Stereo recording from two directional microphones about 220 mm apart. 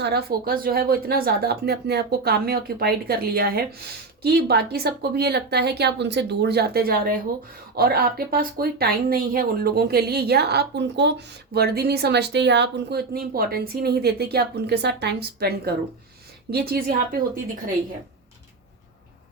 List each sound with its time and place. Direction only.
0.0 s speech: 45° right (ahead or behind)